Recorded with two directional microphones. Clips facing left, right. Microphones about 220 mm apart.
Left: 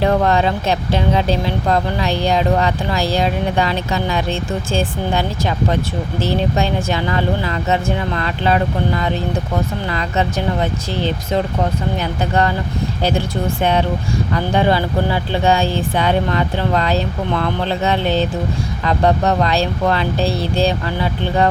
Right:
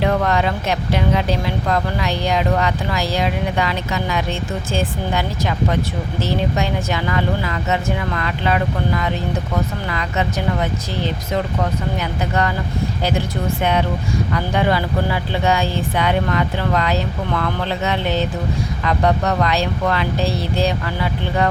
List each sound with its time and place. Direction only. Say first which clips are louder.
0.0 s speech: left 3 dB; 30° left (ahead or behind)